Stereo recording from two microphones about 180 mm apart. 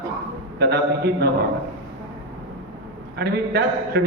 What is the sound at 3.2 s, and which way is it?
Speech, 65° right (ahead or behind).